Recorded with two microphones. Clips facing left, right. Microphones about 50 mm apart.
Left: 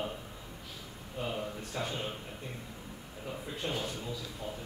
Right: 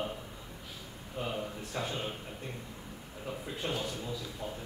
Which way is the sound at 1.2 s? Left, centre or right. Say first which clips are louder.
Even; centre.